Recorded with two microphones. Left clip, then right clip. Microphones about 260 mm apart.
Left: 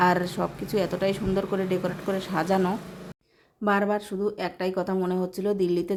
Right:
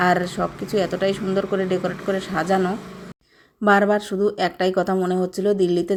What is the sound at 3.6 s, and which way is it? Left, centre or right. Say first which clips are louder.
Speech: right 8 dB; centre.